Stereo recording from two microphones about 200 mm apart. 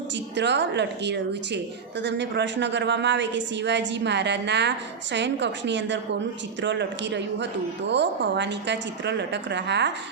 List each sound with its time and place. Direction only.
0.3 s a woman's voice: 60° right (ahead or behind)